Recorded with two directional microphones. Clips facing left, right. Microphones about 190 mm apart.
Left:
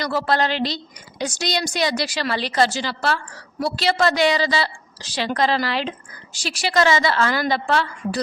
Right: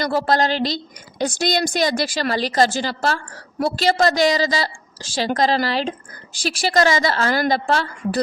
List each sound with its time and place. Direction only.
0.0 s a woman's voice: 45° right (ahead or behind)
1.2 s a woman's voice: 55° right (ahead or behind)